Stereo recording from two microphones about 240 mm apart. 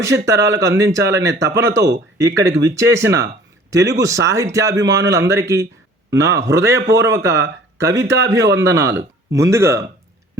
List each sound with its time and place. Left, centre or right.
0.1 s speech: right
0.5 s speech: centre